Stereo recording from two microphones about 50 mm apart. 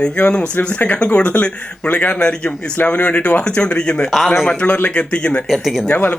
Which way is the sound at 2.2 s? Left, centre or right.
Centre.